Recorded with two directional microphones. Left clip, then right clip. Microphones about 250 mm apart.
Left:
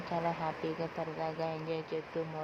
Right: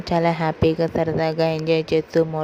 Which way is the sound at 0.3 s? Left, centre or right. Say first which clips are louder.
Right 15 dB; right.